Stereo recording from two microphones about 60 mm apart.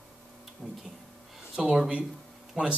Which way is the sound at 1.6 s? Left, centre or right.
Centre.